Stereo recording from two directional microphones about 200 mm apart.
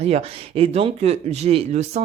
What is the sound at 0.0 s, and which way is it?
Speech, 30° right (ahead or behind).